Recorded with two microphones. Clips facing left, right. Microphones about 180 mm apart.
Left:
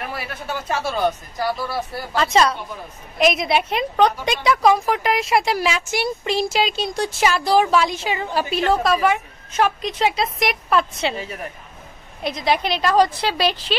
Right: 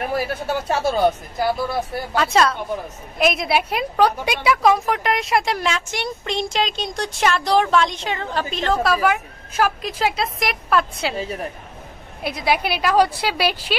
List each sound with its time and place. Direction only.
0.1 s speech: 35° right (ahead or behind)
1.0 s a woman's voice: 15° right (ahead or behind)
3.2 s a woman's voice: centre (ahead or behind)
12.2 s a woman's voice: 5° right (ahead or behind)